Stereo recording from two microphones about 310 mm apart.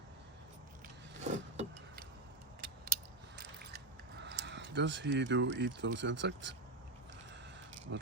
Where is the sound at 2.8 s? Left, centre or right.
Right.